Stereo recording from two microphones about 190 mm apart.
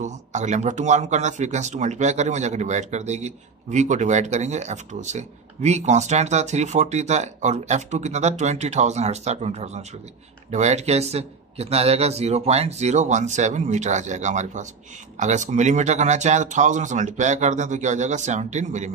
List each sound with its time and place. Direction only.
0.0 s speech: 40° right (ahead or behind)